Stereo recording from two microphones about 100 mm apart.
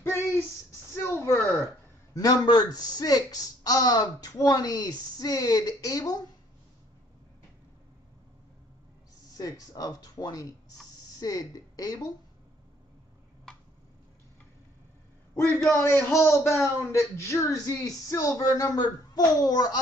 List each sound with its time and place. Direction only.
0.0 s a sound: 25° left (ahead or behind)
2.1 s a man's voice: 40° left (ahead or behind)
9.4 s a man's voice: 40° left (ahead or behind)
15.7 s a man's voice: 25° left (ahead or behind); by 19.8 s 45° left (ahead or behind)